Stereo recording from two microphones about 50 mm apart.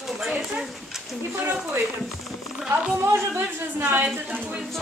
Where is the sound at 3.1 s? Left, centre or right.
Right.